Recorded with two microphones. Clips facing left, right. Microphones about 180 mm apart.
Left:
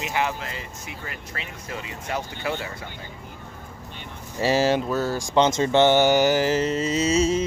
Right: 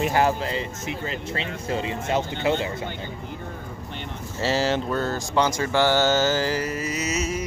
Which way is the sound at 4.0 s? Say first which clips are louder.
Left 2 dB; 15° left (ahead or behind).